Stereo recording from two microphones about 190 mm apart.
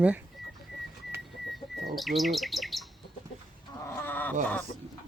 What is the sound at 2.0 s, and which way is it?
Speech, centre (ahead or behind).